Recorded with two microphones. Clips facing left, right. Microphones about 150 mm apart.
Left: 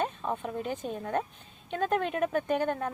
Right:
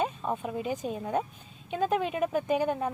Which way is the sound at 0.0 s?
5° right (ahead or behind).